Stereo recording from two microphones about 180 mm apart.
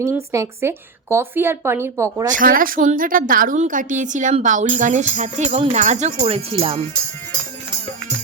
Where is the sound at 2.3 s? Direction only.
50° right (ahead or behind); by 6.8 s 30° right (ahead or behind).